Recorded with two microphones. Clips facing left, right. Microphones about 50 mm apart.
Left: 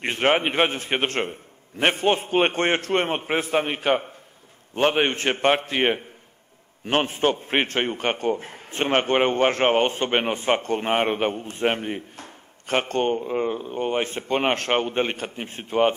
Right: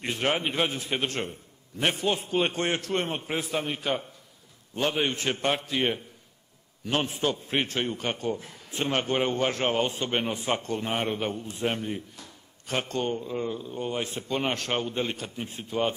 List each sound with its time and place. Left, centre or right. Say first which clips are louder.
0.0 s a man's voice: left 6 dB; left